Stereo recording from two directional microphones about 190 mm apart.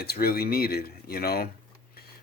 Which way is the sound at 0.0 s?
55° left (ahead or behind).